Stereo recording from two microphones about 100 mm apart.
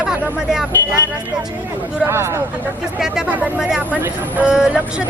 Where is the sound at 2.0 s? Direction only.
25° right (ahead or behind).